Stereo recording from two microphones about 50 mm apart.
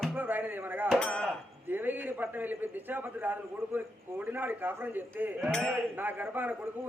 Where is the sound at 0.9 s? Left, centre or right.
Centre.